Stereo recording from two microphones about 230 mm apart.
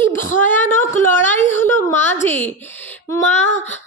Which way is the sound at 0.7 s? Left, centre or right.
Centre.